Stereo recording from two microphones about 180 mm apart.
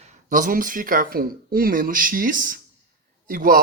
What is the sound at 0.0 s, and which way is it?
A woman's voice, 45° right (ahead or behind).